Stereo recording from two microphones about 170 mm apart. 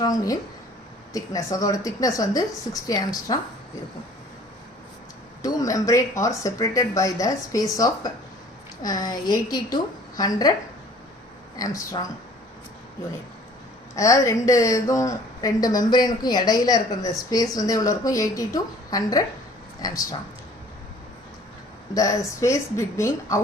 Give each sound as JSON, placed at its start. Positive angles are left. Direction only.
{"t": 0.0, "sound": "a woman's voice", "side_deg": 20}
{"t": 5.4, "sound": "speech", "side_deg": 20}
{"t": 11.5, "sound": "speech", "side_deg": 20}
{"t": 13.9, "sound": "speech", "side_deg": 20}
{"t": 21.9, "sound": "a woman's voice", "side_deg": 20}